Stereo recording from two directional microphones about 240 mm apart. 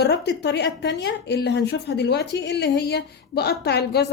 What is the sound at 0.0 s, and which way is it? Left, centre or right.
A woman's voice, left.